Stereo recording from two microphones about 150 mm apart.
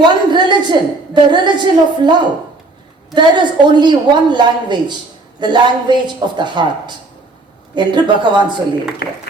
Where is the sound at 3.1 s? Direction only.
30° right (ahead or behind).